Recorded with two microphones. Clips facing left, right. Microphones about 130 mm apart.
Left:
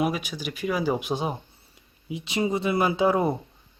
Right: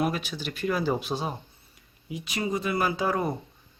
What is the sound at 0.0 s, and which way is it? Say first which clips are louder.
Speech: left 2 dB; 10° left (ahead or behind).